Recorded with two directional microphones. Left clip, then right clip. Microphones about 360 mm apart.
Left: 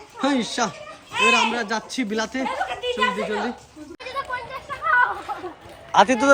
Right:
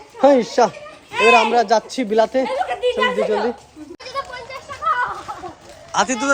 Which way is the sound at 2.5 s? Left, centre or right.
Centre.